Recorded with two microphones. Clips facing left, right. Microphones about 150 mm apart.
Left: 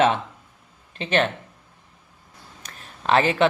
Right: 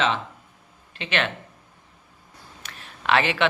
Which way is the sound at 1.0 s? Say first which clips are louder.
Left 5 dB; 40° left (ahead or behind).